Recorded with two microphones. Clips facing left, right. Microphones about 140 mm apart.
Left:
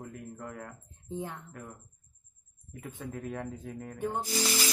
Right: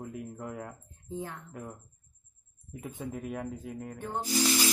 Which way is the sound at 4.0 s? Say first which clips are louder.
Left 4 dB; 15° left (ahead or behind).